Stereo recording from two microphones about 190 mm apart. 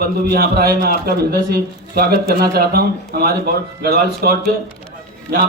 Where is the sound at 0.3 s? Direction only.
55° right (ahead or behind).